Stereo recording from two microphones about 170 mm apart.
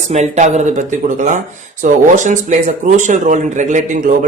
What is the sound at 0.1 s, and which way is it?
Speech, 45° right (ahead or behind).